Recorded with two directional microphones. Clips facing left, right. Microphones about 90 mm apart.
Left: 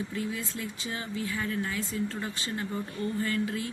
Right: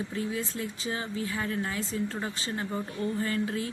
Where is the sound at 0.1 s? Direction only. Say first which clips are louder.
Right 2 dB; 35° right (ahead or behind).